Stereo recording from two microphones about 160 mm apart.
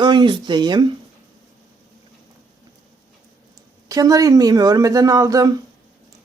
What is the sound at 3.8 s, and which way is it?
Speech, 20° right (ahead or behind).